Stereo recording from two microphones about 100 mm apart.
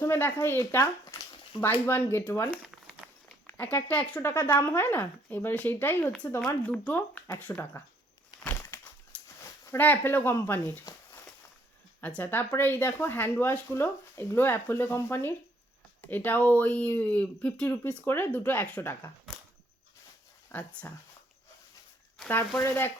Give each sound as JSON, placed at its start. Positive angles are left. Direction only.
{"t": 0.0, "sound": "speech", "side_deg": 25}
{"t": 1.9, "sound": "speech", "side_deg": 25}
{"t": 8.4, "sound": "a sound", "side_deg": 20}
{"t": 9.4, "sound": "speech", "side_deg": 25}
{"t": 11.9, "sound": "speech", "side_deg": 20}
{"t": 20.5, "sound": "speech", "side_deg": 20}
{"t": 22.5, "sound": "speech", "side_deg": 20}